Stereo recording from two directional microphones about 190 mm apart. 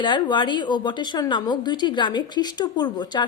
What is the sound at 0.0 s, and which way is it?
Speech, 25° left (ahead or behind).